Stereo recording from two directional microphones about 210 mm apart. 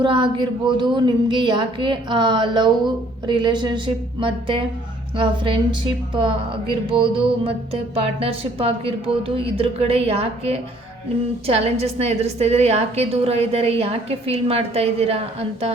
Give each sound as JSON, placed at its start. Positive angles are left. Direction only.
{"t": 0.0, "sound": "music", "side_deg": -20}